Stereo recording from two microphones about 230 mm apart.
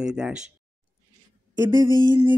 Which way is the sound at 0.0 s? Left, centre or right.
Centre.